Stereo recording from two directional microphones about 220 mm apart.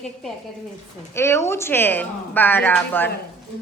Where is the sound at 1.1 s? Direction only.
10° left (ahead or behind).